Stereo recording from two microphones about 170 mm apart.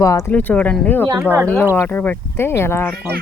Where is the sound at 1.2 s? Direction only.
10° right (ahead or behind).